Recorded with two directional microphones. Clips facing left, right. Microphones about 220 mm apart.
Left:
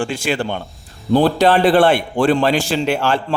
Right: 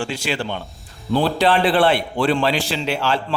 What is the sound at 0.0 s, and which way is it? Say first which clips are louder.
A man's voice: left 4 dB; 50° left (ahead or behind).